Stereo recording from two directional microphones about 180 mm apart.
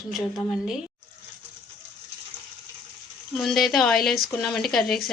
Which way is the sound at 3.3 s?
Centre (ahead or behind).